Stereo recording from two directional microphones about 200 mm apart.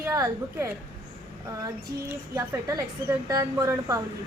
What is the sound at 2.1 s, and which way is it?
A woman's voice, 15° right (ahead or behind).